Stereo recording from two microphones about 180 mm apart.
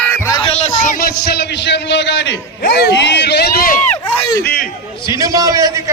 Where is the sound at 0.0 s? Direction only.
15° left (ahead or behind).